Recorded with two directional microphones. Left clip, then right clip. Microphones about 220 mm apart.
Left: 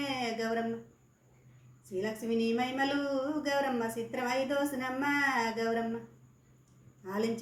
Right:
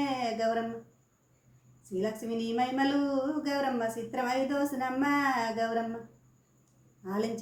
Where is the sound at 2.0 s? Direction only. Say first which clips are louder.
Left 1 dB; 20° right (ahead or behind).